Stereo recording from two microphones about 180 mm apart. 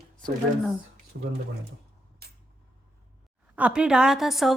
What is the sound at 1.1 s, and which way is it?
Speech, 75° right (ahead or behind).